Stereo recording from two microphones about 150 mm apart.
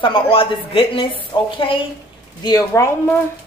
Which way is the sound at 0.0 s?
35° left (ahead or behind).